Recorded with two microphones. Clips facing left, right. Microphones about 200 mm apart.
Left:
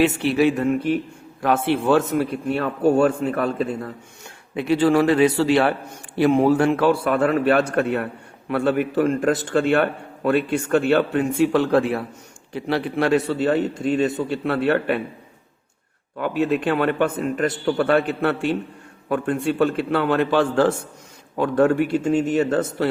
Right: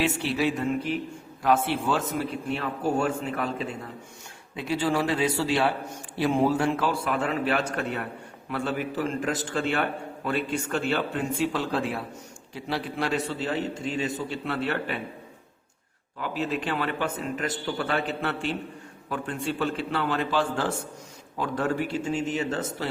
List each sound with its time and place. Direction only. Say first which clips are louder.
0.0 s a man's voice: left 8 dB; 60° left (ahead or behind)
16.1 s a man's voice: left 8 dB; 60° left (ahead or behind)